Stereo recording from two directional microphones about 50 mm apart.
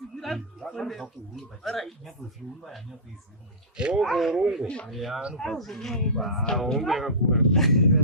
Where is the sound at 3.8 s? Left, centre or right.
Centre.